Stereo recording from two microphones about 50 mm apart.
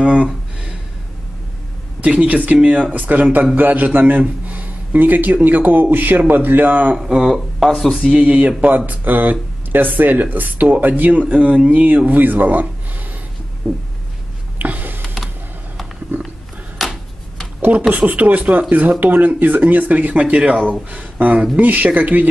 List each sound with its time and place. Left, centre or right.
0.0 s speech: right
2.0 s speech: right
7.0 s speech: centre
7.2 s speech: centre
8.1 s speech: right
11.1 s speech: right
13.6 s a sound: centre
14.6 s a sound: right
16.8 s tick-tock: centre
17.6 s speech: right
20.9 s speech: right